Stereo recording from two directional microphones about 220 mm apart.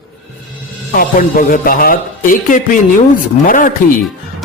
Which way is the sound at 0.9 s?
40° left (ahead or behind).